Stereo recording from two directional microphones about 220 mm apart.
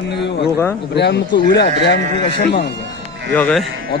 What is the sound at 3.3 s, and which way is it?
Speech, 5° left (ahead or behind).